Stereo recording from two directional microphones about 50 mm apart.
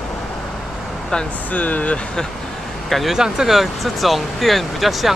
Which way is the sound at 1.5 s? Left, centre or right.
Left.